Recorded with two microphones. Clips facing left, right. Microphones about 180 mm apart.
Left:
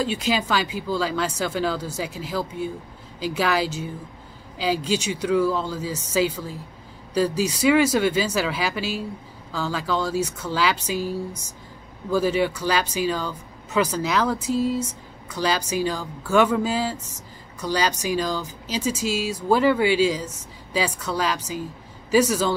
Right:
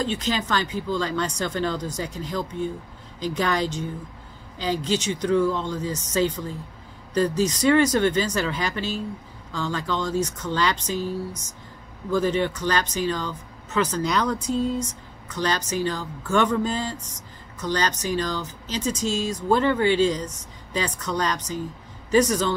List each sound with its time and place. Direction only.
0.0 s speech: 10° left (ahead or behind)